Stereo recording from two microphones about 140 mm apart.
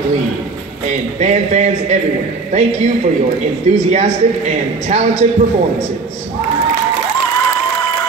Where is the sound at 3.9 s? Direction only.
55° right (ahead or behind).